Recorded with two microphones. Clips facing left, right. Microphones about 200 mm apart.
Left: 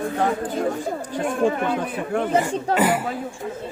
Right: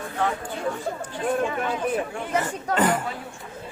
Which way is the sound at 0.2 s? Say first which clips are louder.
Left 3 dB; 40° left (ahead or behind).